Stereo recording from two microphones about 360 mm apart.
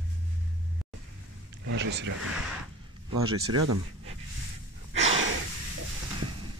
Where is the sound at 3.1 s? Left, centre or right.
Right.